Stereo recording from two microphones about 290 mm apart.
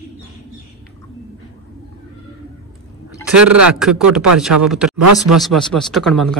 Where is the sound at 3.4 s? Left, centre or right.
Right.